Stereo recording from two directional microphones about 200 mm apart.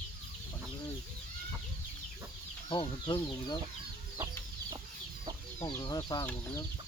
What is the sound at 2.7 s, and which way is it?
Speech, 25° left (ahead or behind).